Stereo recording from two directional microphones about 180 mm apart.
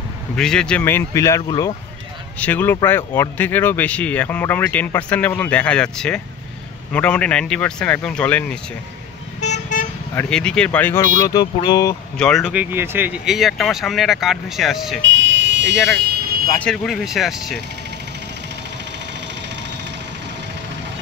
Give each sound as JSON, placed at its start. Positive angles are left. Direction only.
{"t": 0.4, "sound": "speech", "side_deg": 5}
{"t": 9.4, "sound": "vehicle", "side_deg": 40}
{"t": 10.1, "sound": "speech", "side_deg": 5}
{"t": 12.2, "sound": "speech", "side_deg": 0}
{"t": 15.0, "sound": "a sound", "side_deg": -90}
{"t": 15.7, "sound": "speech", "side_deg": 0}